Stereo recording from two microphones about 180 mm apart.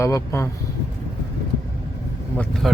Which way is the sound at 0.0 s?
15° left (ahead or behind).